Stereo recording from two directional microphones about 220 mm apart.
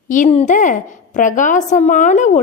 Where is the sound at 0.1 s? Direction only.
30° left (ahead or behind).